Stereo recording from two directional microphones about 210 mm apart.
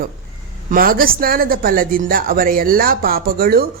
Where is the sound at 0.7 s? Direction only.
45° right (ahead or behind).